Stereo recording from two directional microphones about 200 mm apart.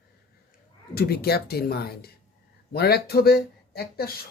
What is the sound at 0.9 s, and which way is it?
Speech, 50° left (ahead or behind).